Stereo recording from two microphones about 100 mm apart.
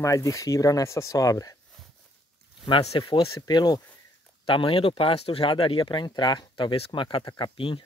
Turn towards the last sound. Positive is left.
turn(degrees=50)  # may be behind; listen again after turning